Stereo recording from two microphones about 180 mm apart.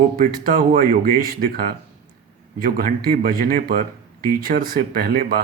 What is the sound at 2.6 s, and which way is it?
Speech, 50° right (ahead or behind).